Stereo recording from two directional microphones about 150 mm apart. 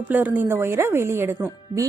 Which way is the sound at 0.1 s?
10° right (ahead or behind).